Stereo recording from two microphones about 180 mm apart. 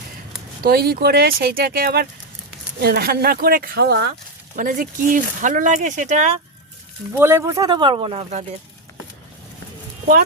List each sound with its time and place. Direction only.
0.6 s speech: 60° right (ahead or behind)
4.5 s speech: 50° right (ahead or behind)
7.2 s speech: 15° right (ahead or behind); by 8.4 s 35° right (ahead or behind)